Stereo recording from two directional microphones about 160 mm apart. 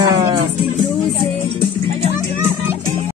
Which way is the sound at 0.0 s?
30° right (ahead or behind).